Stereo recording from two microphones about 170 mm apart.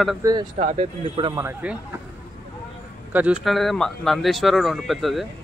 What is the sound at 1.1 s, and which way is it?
Speech, 30° right (ahead or behind).